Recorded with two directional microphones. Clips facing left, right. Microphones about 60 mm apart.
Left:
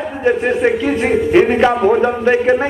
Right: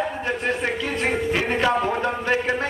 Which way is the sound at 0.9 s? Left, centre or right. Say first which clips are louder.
Left 8 dB; centre.